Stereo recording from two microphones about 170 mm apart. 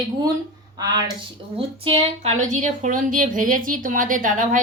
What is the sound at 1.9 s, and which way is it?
A woman's voice, 40° right (ahead or behind).